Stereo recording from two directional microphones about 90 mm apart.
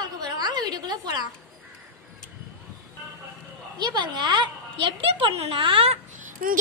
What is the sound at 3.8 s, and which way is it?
Speech, 55° right (ahead or behind).